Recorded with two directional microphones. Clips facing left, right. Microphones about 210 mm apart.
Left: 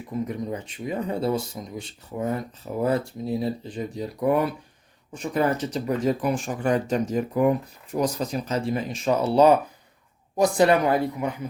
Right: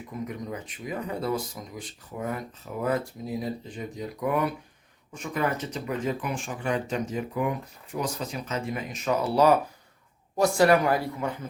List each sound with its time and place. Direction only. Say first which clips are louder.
0.3 s speech: left 5 dB; 30° left (ahead or behind)